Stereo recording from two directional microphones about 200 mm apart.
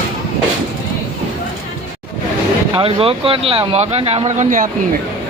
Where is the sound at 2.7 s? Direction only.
30° right (ahead or behind).